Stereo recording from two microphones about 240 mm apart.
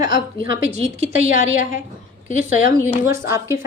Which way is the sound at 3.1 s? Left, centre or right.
Centre.